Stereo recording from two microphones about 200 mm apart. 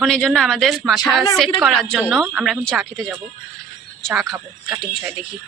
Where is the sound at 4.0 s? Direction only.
Centre (ahead or behind).